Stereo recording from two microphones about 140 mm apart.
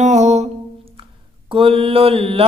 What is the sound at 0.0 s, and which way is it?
Music, 55° right (ahead or behind).